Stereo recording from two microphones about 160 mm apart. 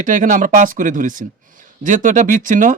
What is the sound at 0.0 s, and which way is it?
Speech, 55° right (ahead or behind).